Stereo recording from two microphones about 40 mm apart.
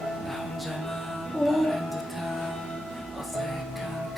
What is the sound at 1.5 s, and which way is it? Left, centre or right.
Music, centre.